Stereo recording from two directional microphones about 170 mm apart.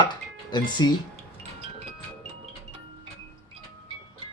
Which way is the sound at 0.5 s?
25° left (ahead or behind).